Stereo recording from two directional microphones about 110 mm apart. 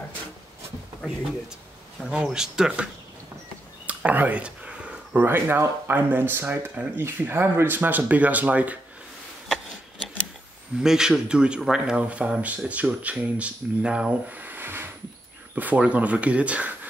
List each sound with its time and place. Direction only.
2.0 s speech: 5° right (ahead or behind)
10.8 s speech: 5° right (ahead or behind)